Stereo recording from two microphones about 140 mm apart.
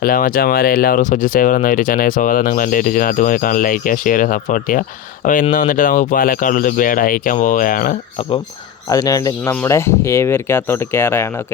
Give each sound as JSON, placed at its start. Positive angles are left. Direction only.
{"t": 0.0, "sound": "speech", "side_deg": 90}
{"t": 8.9, "sound": "speech", "side_deg": 25}